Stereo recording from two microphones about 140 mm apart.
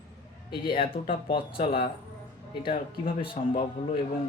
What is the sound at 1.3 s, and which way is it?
Speech, 40° left (ahead or behind).